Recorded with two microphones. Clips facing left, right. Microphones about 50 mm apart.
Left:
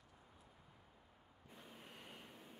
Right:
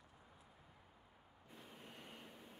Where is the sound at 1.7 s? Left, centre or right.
Centre.